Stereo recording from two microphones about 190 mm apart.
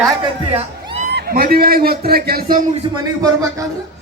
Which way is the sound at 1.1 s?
50° right (ahead or behind).